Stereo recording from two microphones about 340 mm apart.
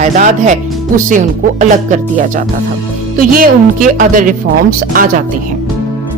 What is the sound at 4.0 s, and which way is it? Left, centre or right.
Speech, right.